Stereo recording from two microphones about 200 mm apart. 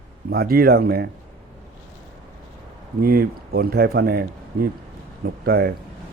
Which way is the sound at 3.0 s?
50° right (ahead or behind).